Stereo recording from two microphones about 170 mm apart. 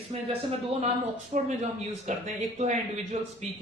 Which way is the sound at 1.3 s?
50° right (ahead or behind).